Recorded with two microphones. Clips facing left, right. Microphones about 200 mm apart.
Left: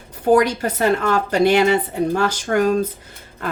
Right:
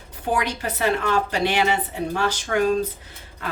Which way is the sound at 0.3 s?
40° left (ahead or behind).